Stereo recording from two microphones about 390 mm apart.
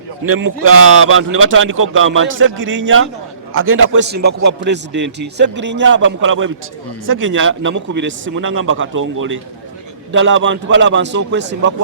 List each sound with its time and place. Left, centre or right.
0.6 s a man's voice: right